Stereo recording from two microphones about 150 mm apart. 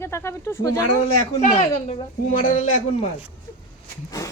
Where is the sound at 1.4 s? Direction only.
60° left (ahead or behind).